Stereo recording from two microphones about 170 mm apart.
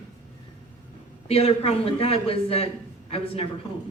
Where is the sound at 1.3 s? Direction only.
35° left (ahead or behind).